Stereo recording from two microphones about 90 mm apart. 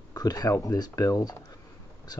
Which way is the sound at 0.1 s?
45° left (ahead or behind).